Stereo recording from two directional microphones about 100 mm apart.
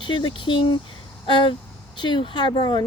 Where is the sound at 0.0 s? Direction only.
55° left (ahead or behind).